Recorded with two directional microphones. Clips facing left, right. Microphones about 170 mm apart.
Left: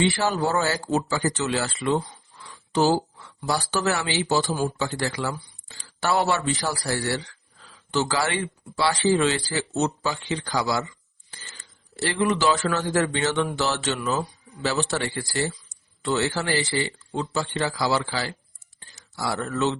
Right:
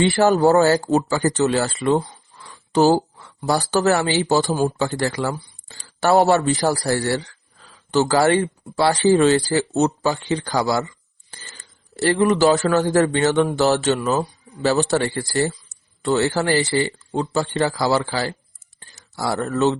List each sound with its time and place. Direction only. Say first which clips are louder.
0.0 s speech: right 8 dB; 45° right (ahead or behind)